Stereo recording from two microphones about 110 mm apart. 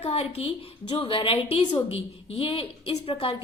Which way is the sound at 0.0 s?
65° left (ahead or behind).